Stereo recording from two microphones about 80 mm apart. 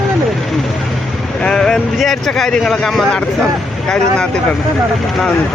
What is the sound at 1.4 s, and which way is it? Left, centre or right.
Vehicle, centre.